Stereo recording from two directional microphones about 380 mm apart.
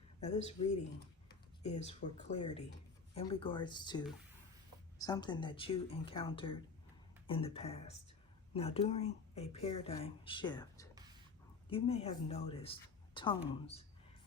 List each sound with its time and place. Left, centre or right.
0.2 s speech: centre